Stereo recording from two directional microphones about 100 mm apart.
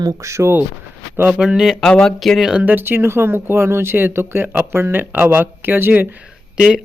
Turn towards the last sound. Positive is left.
turn(degrees=-5)  # may be behind; listen again after turning